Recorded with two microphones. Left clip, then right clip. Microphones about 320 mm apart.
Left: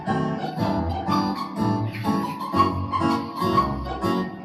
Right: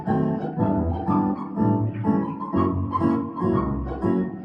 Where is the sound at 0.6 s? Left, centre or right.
Left.